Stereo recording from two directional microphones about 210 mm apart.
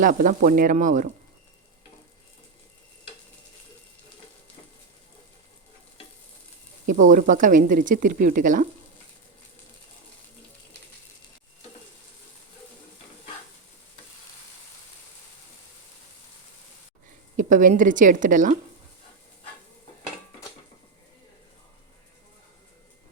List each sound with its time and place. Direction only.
0.0 s speech: 40° right (ahead or behind)
6.8 s speech: 40° right (ahead or behind)
17.3 s speech: 40° right (ahead or behind)